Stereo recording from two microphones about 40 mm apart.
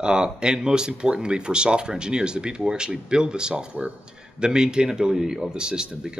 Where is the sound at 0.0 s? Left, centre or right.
Right.